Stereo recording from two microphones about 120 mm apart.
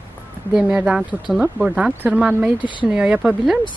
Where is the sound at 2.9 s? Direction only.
10° right (ahead or behind).